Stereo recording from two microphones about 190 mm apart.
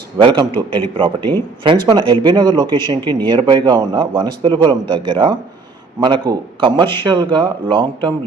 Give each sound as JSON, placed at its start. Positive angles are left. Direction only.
{"t": 0.2, "sound": "speech", "side_deg": -25}